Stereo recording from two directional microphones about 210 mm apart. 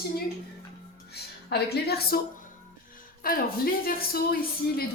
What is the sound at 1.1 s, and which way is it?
A woman's voice, 50° left (ahead or behind).